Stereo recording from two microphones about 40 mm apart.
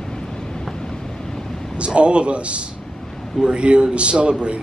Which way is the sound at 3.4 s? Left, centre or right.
Right.